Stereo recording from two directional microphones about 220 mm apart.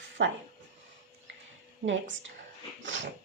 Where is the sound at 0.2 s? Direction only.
55° right (ahead or behind).